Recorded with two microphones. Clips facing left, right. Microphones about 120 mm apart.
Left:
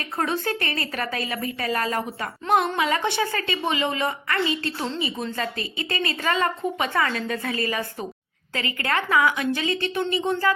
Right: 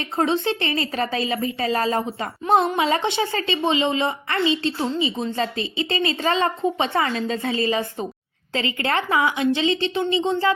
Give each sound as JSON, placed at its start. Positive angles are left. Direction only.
{"t": 0.0, "sound": "a woman's voice", "side_deg": -25}